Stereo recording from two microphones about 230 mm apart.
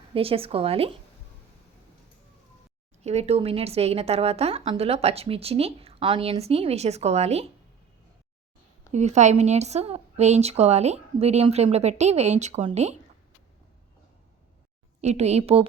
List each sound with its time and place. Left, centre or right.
0.1 s speech: right
3.0 s speech: right
8.9 s speech: right
15.0 s speech: right